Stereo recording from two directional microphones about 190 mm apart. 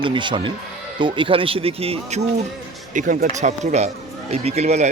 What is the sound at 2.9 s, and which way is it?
Speech, 45° right (ahead or behind).